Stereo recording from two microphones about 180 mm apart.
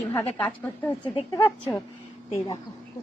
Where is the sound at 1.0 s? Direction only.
25° left (ahead or behind).